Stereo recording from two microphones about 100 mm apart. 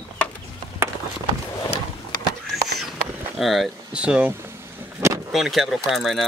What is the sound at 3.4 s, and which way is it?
Speech, centre (ahead or behind).